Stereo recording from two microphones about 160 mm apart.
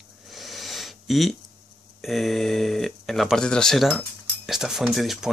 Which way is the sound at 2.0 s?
Centre (ahead or behind).